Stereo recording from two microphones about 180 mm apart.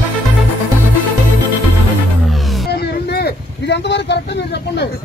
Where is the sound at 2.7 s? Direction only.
65° left (ahead or behind).